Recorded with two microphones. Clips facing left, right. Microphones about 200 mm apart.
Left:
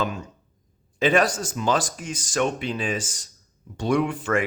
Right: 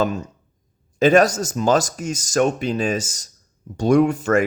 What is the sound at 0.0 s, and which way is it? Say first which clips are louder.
Speech: right 6 dB; 40° right (ahead or behind).